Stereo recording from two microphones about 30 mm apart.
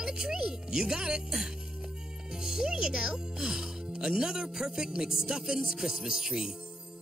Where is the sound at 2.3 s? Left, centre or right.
Centre.